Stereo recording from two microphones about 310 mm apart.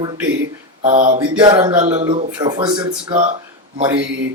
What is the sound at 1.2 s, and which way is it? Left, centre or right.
Speech, centre.